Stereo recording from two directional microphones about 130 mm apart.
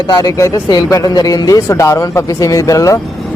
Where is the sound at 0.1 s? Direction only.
30° left (ahead or behind).